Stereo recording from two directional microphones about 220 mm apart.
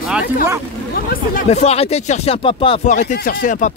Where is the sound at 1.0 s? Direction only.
45° left (ahead or behind).